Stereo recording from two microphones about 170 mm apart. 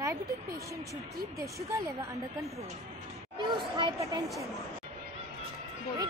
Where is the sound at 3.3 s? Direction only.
30° right (ahead or behind).